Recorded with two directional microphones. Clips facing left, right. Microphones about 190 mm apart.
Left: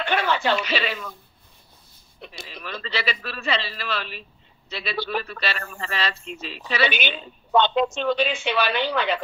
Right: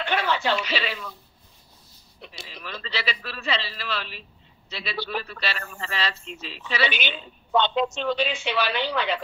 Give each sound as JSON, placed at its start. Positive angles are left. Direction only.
{"t": 0.0, "sound": "speech", "side_deg": 55}
{"t": 2.2, "sound": "a woman's voice", "side_deg": 55}